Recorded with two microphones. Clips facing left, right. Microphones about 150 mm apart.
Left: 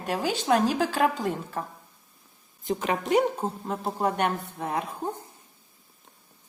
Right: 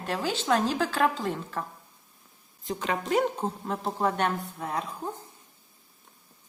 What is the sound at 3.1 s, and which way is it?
Speech, 10° left (ahead or behind).